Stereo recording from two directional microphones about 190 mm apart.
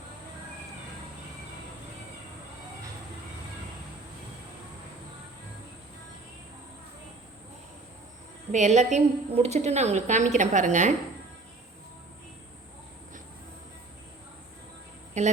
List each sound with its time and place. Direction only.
8.5 s a woman's voice: 40° right (ahead or behind)
15.2 s a woman's voice: 40° right (ahead or behind)